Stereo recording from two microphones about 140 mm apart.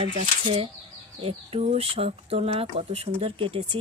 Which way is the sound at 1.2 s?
45° right (ahead or behind).